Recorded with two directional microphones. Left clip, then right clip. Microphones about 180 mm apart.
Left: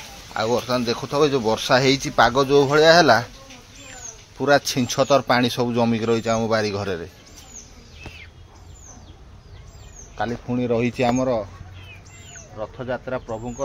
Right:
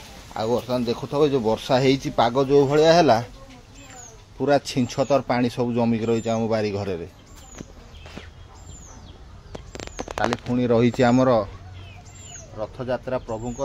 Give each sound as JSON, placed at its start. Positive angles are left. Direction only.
{"t": 0.4, "sound": "speech", "side_deg": -5}
{"t": 4.4, "sound": "speech", "side_deg": -10}
{"t": 10.7, "sound": "speech", "side_deg": -35}
{"t": 11.1, "sound": "speech", "side_deg": -55}
{"t": 12.5, "sound": "speech", "side_deg": -10}